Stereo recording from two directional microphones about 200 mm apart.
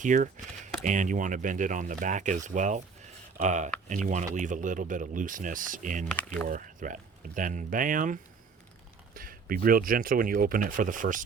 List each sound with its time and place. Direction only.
0.0 s speech: 40° right (ahead or behind)
6.1 s speech: 10° left (ahead or behind)
6.5 s speech: 40° right (ahead or behind)